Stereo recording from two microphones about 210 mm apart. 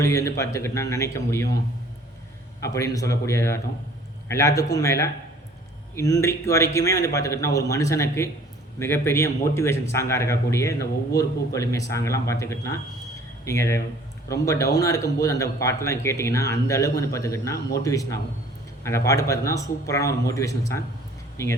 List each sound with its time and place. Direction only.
0.0 s speech: 15° left (ahead or behind)
2.6 s speech: 15° left (ahead or behind)